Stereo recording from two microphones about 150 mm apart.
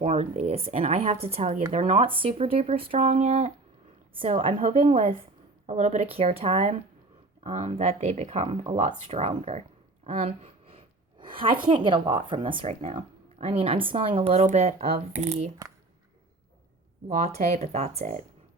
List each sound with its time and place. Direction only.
0.0 s speech: 45° right (ahead or behind)
4.1 s speech: 35° right (ahead or behind)
10.1 s a sound: 45° right (ahead or behind)
11.7 s speech: 35° right (ahead or behind); by 15.5 s 50° right (ahead or behind)
17.1 s speech: 50° right (ahead or behind)